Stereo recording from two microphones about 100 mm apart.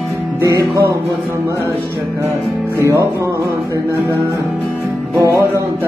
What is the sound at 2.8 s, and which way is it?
Music, 25° right (ahead or behind).